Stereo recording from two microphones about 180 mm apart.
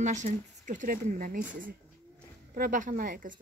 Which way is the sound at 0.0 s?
40° right (ahead or behind).